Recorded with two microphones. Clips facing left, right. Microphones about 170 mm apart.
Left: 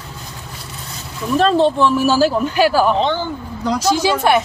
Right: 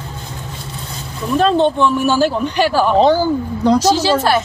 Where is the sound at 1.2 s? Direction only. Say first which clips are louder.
Even; centre (ahead or behind).